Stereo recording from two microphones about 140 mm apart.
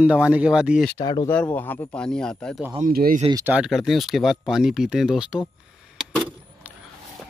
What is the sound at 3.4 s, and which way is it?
Speech, 5° right (ahead or behind).